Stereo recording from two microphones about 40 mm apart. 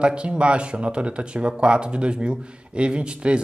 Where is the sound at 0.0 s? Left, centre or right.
Right.